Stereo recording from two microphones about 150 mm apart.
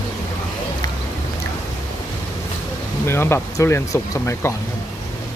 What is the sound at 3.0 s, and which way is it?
Speech, 15° left (ahead or behind).